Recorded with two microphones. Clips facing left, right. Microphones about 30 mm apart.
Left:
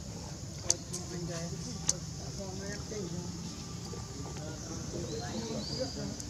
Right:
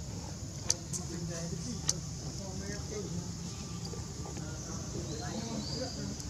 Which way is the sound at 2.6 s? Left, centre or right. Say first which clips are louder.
Even; centre.